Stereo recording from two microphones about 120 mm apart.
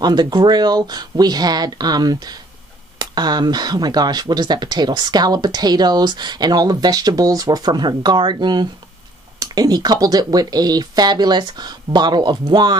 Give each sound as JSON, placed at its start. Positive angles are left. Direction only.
{"t": 0.0, "sound": "speech", "side_deg": -40}